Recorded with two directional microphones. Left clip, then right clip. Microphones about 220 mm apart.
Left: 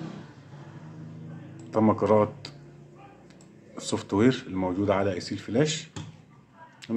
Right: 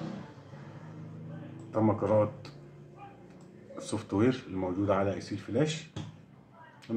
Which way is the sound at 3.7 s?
45° left (ahead or behind).